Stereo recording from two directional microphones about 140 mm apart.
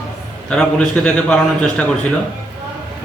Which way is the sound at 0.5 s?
5° left (ahead or behind).